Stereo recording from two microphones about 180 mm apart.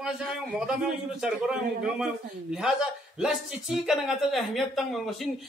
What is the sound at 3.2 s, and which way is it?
A man's voice, 5° right (ahead or behind).